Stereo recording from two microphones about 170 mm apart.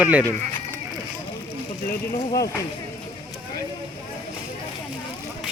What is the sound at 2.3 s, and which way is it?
Speech, 20° left (ahead or behind).